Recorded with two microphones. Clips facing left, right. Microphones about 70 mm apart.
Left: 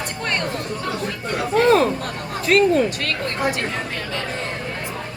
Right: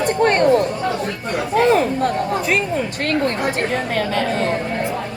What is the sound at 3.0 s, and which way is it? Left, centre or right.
Speech, right.